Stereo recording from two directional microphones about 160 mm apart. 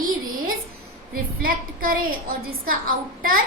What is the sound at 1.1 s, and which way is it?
A woman's voice, 65° right (ahead or behind).